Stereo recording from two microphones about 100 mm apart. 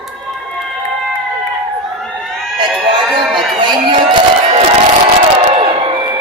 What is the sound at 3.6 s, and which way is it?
Speech, 50° right (ahead or behind).